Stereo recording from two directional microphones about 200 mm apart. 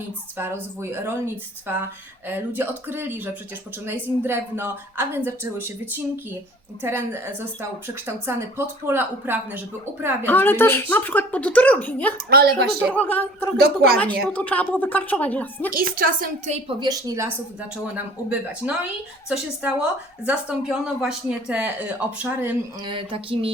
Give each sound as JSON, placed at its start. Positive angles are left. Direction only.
{"t": 0.3, "sound": "speech", "side_deg": -10}
{"t": 10.2, "sound": "a woman's voice", "side_deg": 10}
{"t": 12.1, "sound": "a woman's voice", "side_deg": -50}
{"t": 12.8, "sound": "a woman's voice", "side_deg": 10}
{"t": 13.6, "sound": "a woman's voice", "side_deg": -50}
{"t": 14.3, "sound": "a woman's voice", "side_deg": 5}
{"t": 15.7, "sound": "a woman's voice", "side_deg": -45}
{"t": 16.6, "sound": "a woman's voice", "side_deg": -20}
{"t": 22.8, "sound": "speech", "side_deg": -25}